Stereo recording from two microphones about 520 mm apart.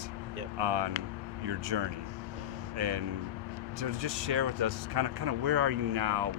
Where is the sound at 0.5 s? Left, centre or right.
Right.